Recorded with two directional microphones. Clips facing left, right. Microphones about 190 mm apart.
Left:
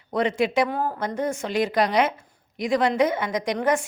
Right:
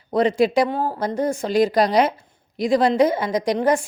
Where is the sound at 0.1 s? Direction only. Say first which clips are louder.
Right 5 dB; 35° right (ahead or behind).